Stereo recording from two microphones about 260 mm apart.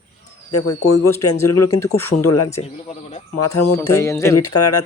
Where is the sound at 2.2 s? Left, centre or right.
Left.